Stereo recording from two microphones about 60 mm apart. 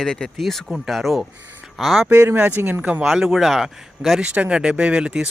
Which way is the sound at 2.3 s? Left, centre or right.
Right.